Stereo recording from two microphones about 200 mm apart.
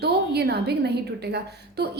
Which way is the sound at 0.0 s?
55° right (ahead or behind).